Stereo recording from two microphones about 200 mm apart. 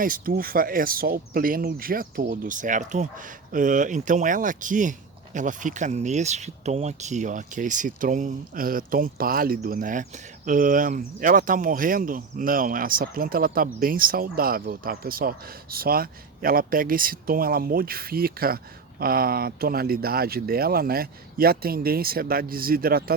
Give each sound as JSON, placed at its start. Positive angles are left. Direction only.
{"t": 0.0, "sound": "speech", "side_deg": -45}